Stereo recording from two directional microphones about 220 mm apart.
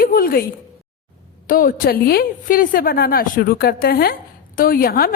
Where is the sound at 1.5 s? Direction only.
40° left (ahead or behind).